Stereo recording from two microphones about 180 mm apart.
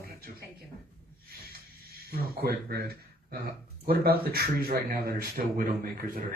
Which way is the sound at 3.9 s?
55° right (ahead or behind).